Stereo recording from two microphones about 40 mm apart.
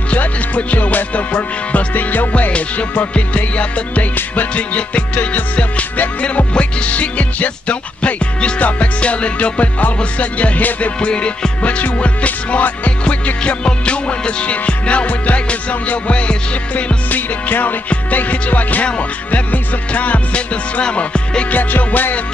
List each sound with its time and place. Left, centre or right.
0.1 s music: left
2.0 s music: left
11.1 s music: left
13.0 s music: left
17.1 s music: left
21.5 s music: left